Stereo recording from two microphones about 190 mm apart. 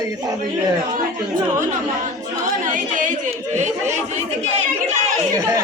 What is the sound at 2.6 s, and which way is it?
Speech, 45° right (ahead or behind).